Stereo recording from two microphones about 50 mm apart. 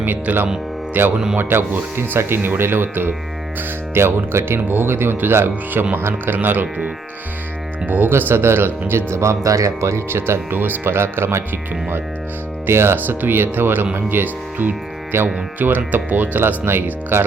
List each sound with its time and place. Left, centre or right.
0.0 s speech: right
1.1 s speech: centre
1.4 s speech: right
3.9 s speech: right
7.9 s speech: right
8.3 s speech: right
10.1 s speech: right
12.6 s speech: right
15.1 s speech: right
15.5 s speech: right
16.4 s speech: right